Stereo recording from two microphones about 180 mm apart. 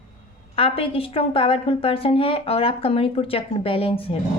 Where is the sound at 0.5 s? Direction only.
30° left (ahead or behind).